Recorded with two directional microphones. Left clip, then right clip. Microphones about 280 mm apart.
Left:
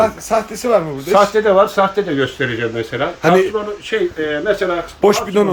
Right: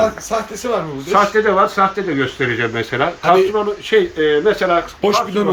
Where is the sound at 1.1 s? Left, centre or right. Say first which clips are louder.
Left 2 dB; left.